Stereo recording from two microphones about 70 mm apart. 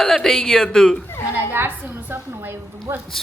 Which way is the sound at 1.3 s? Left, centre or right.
Right.